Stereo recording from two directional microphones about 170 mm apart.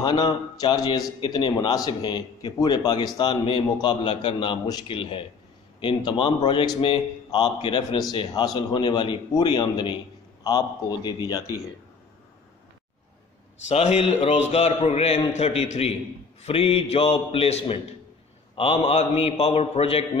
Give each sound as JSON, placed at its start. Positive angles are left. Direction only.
{"t": 0.0, "sound": "a man's voice", "side_deg": 25}
{"t": 13.7, "sound": "a man's voice", "side_deg": 40}